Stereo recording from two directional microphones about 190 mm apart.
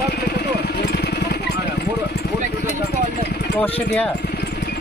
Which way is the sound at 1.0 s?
60° left (ahead or behind).